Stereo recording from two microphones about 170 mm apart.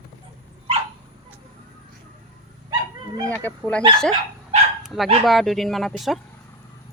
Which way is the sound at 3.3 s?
10° left (ahead or behind).